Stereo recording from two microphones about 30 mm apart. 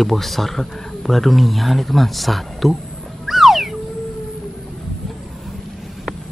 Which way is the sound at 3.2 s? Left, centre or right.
Centre.